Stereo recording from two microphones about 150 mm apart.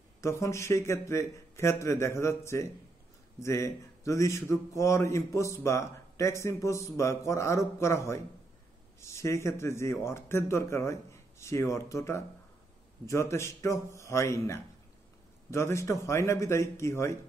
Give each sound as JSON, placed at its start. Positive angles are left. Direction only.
{"t": 0.2, "sound": "a man's voice", "side_deg": 20}